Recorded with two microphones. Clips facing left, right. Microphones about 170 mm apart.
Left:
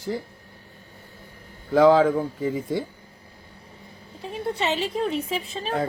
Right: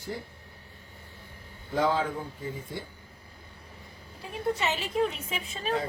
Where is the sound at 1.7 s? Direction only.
90° left.